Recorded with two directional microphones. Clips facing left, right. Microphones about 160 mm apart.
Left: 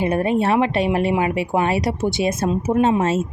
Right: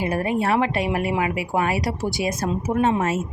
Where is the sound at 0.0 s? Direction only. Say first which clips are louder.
Left 4 dB; 25° left (ahead or behind).